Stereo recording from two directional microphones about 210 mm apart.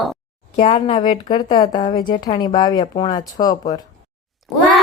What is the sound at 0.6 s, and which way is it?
Speech, 30° left (ahead or behind).